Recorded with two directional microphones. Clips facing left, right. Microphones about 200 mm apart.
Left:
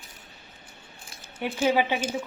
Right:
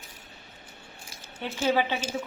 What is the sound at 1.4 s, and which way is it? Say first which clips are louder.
Speech: left 2 dB; 10° left (ahead or behind).